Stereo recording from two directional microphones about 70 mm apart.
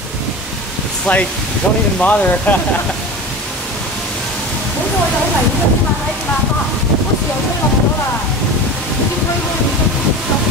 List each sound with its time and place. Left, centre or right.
1.1 s speech: centre